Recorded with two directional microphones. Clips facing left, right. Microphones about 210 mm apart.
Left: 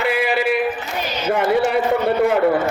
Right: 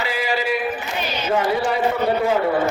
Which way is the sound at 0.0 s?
60° left (ahead or behind).